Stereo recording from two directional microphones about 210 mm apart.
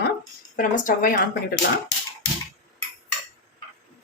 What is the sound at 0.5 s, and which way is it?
Speech, 40° left (ahead or behind).